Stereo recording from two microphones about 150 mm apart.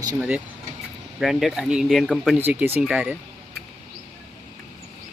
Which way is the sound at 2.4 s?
15° right (ahead or behind).